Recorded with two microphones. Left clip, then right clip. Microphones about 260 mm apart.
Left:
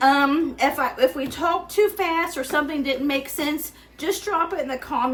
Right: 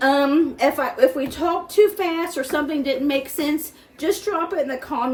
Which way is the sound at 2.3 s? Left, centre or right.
Centre.